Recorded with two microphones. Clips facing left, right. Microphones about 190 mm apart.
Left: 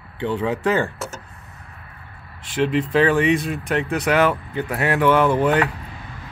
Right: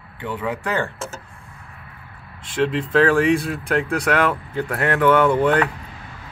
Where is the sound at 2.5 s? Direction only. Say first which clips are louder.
Even; 5° left (ahead or behind).